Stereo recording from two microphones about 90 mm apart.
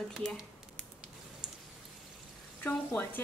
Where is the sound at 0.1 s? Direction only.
5° left (ahead or behind).